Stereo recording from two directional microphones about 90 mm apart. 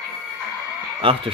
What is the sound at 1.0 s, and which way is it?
Speech, 90° right.